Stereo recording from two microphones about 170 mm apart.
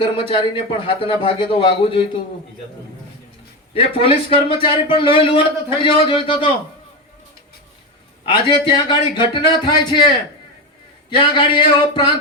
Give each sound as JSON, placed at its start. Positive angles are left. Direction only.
{"t": 0.0, "sound": "a man's voice", "side_deg": 30}
{"t": 3.8, "sound": "a man's voice", "side_deg": 35}
{"t": 8.2, "sound": "speech", "side_deg": 25}
{"t": 11.1, "sound": "speech", "side_deg": 30}